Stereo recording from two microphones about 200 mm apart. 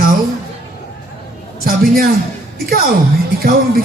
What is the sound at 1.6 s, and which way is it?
Speech, 45° right (ahead or behind).